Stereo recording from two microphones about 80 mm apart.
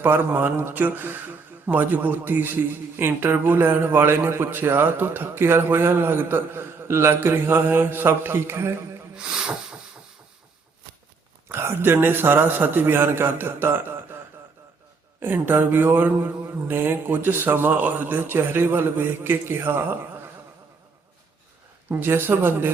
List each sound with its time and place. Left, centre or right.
0.0 s speech: right
9.1 s speech: centre
11.4 s speech: right
15.2 s speech: right
21.8 s speech: right